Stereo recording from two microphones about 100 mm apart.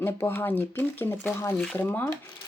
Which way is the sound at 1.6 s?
10° left (ahead or behind).